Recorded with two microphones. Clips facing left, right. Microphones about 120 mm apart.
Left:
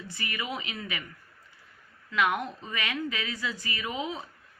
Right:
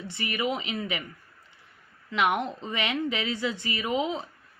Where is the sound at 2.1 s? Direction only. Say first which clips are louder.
Right 2 dB; 25° right (ahead or behind).